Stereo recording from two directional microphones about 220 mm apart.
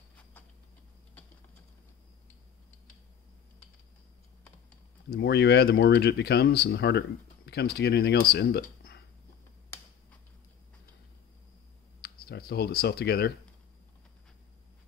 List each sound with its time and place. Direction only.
5.1 s speech: 50° left (ahead or behind)
12.0 s speech: 45° left (ahead or behind)